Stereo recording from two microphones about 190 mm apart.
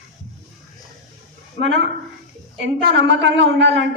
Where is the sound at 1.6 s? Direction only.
70° right (ahead or behind).